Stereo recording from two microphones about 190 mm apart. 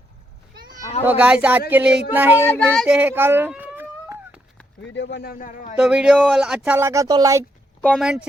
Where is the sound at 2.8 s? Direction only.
5° right (ahead or behind).